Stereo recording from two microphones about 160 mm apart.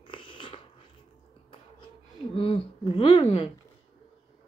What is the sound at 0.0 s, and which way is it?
Biting, 30° left (ahead or behind).